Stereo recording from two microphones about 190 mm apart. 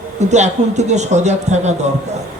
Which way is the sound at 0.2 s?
35° right (ahead or behind).